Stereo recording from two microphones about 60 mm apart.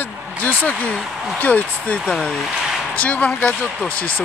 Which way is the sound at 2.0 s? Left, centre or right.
Centre.